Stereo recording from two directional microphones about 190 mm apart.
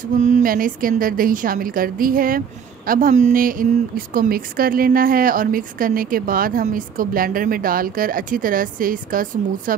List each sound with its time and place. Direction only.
0.2 s a woman's voice: 45° right (ahead or behind)